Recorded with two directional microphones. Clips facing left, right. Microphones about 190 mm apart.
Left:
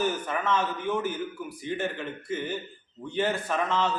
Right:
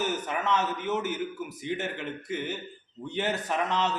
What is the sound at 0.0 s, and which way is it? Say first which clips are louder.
A man's voice: left 2 dB; 20° right (ahead or behind).